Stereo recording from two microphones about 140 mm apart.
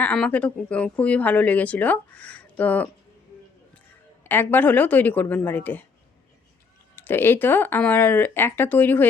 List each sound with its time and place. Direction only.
0.0 s a woman's voice: 10° left (ahead or behind)
4.2 s a woman's voice: 15° left (ahead or behind)
6.9 s a woman's voice: 15° left (ahead or behind)